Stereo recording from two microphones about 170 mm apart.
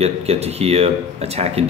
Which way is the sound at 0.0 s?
40° right (ahead or behind).